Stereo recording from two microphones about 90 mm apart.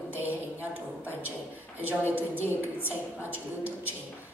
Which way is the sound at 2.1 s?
20° right (ahead or behind).